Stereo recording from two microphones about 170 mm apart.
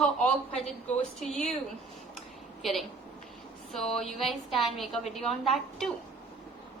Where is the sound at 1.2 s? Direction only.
Centre (ahead or behind).